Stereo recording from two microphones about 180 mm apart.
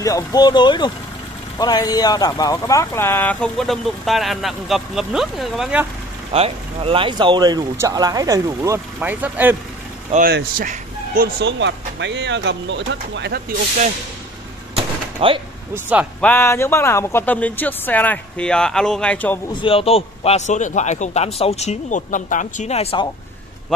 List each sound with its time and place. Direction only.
0.0 s speech: 20° left (ahead or behind); by 5.9 s 5° right (ahead or behind)
6.3 s speech: 35° right (ahead or behind); by 9.6 s 10° right (ahead or behind)
10.1 s speech: 50° right (ahead or behind)
11.4 s speech: 80° right
14.8 s door: 30° right (ahead or behind)
15.7 s speech: 10° right (ahead or behind)
16.2 s speech: 10° left (ahead or behind)
19.5 s a man's voice: 30° left (ahead or behind)